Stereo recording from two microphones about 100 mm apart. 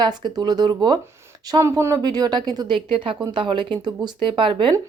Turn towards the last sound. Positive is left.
turn(degrees=-55)  # may be behind; listen again after turning